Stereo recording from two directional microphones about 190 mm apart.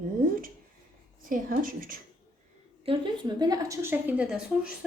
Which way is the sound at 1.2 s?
45° right (ahead or behind).